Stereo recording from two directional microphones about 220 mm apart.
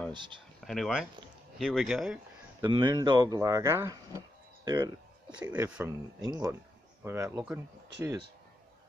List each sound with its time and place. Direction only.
0.7 s speech: centre (ahead or behind)
2.6 s speech: 15° right (ahead or behind)
5.3 s speech: 5° right (ahead or behind)